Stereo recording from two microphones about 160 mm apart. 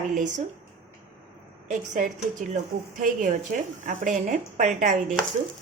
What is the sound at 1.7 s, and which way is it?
A woman's voice, 50° right (ahead or behind).